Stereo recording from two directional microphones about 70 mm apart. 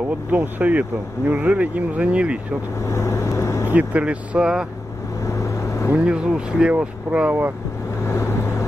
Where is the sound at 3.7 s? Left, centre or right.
Right.